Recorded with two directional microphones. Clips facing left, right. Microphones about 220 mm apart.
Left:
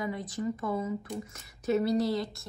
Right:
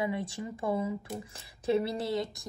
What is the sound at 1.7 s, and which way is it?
Speech, 30° right (ahead or behind).